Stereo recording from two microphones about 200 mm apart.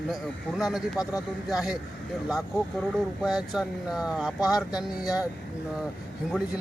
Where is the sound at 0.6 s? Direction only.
Centre (ahead or behind).